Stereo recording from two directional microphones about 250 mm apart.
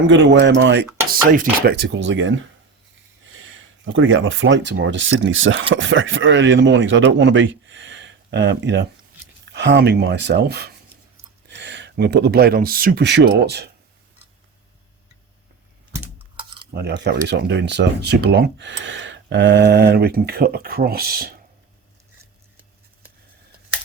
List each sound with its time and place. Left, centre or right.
0.1 s speech: right
1.1 s speech: right
3.3 s speech: right
16.7 s speech: right